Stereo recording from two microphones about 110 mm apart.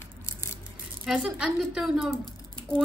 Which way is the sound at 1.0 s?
5° right (ahead or behind).